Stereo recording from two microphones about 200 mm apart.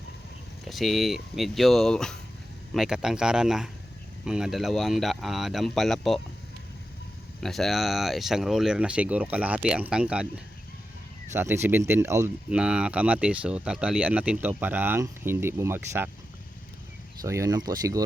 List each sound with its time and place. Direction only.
0.6 s speech: centre (ahead or behind)
7.4 s speech: centre (ahead or behind)
17.2 s speech: 15° right (ahead or behind)